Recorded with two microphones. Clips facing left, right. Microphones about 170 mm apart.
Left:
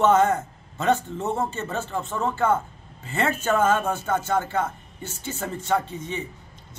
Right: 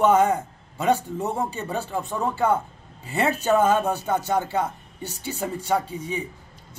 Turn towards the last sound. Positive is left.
turn(degrees=-10)  # may be behind; listen again after turning